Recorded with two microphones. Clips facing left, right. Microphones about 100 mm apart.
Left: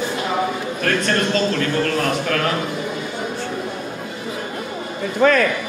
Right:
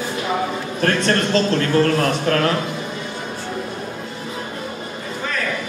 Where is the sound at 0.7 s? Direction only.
30° right (ahead or behind).